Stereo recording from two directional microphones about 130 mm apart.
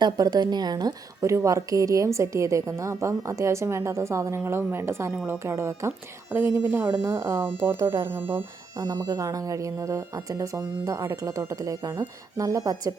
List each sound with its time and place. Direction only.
0.0 s a woman's voice: 30° right (ahead or behind)
8.8 s a woman's voice: 30° right (ahead or behind)